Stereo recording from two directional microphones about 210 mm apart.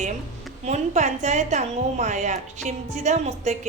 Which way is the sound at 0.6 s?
35° right (ahead or behind).